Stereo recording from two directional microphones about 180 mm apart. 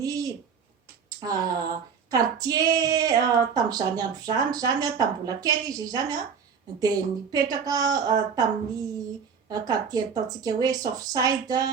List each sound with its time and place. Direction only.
0.0 s a sound: 20° right (ahead or behind)
1.2 s speech: 20° right (ahead or behind)
9.5 s speech: 20° right (ahead or behind)